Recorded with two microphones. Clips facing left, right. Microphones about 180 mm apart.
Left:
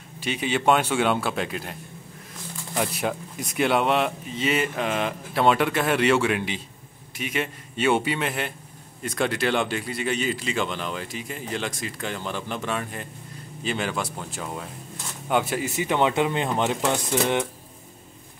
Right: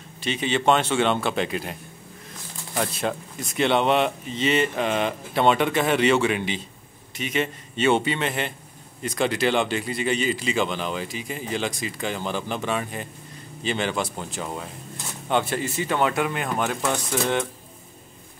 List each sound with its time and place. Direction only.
0.2 s speech: 10° left (ahead or behind)
2.8 s speech: 10° left (ahead or behind)